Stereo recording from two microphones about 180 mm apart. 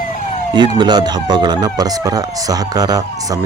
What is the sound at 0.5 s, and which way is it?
Speech, 25° right (ahead or behind).